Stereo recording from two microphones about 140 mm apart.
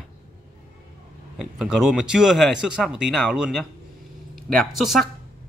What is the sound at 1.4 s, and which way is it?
Speech, 5° right (ahead or behind).